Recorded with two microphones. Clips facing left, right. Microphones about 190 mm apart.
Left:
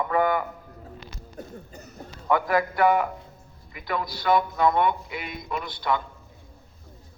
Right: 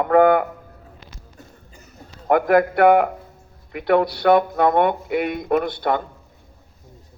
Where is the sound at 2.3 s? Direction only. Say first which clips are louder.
Right 7 dB; 55° right (ahead or behind).